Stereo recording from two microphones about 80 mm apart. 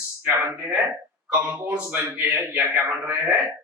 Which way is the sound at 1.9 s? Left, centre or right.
Right.